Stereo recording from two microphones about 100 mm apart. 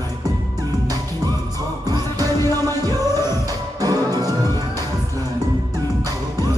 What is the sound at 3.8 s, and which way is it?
Music, 40° right (ahead or behind).